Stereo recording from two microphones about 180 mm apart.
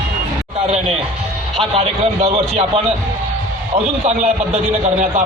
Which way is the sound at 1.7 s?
35° right (ahead or behind).